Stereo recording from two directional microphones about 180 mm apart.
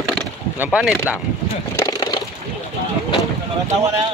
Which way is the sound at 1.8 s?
20° left (ahead or behind).